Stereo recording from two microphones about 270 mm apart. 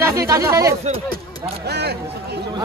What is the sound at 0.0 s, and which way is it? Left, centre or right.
Speech, centre.